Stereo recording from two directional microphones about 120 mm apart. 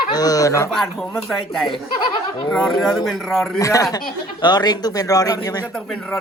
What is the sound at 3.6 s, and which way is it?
Speech, 30° left (ahead or behind).